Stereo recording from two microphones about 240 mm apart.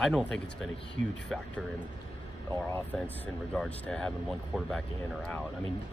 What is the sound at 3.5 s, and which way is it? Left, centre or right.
Speech, centre.